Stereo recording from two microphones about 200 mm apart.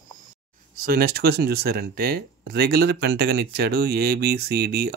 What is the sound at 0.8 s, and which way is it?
Speech, 50° right (ahead or behind).